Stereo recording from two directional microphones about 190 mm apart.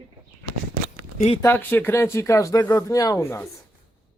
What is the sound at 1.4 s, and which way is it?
Speech, 10° left (ahead or behind).